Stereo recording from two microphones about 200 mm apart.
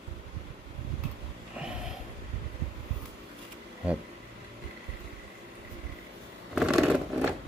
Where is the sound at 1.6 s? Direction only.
5° right (ahead or behind).